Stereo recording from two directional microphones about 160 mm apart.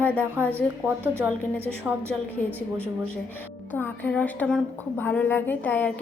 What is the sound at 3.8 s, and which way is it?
A woman's voice, 10° left (ahead or behind).